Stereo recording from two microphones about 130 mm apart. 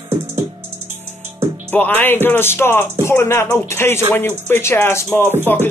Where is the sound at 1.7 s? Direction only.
15° left (ahead or behind).